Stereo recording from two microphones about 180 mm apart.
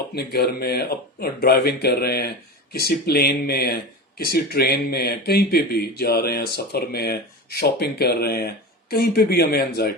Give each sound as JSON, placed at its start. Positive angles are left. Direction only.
{"t": 0.1, "sound": "speech", "side_deg": 65}